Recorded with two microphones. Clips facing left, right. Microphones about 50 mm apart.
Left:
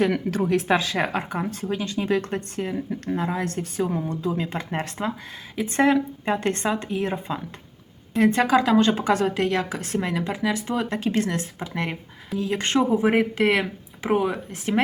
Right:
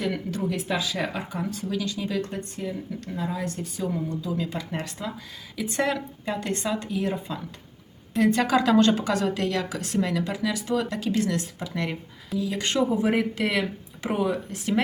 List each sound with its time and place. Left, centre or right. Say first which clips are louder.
0.0 s speech: left 6 dB; left
1.6 s speech: left 4 dB; left
6.2 s a woman's voice: even; left; by 8.9 s centre
8.9 s a woman's voice: left 2 dB; left
12.4 s a woman's voice: left 3 dB; left